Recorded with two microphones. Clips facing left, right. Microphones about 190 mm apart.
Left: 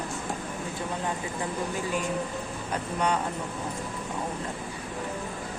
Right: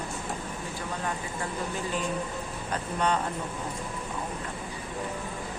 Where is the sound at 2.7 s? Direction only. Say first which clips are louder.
Even; 10° left (ahead or behind).